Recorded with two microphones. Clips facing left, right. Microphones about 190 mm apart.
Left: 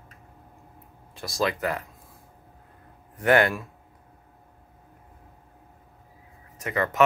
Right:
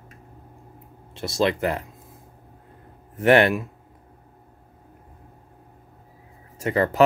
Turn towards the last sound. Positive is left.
turn(degrees=-30)  # may be behind; listen again after turning